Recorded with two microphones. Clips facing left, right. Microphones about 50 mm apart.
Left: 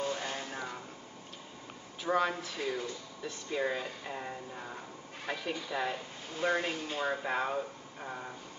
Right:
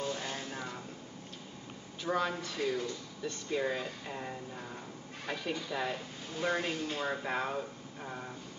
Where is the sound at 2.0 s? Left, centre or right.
Centre.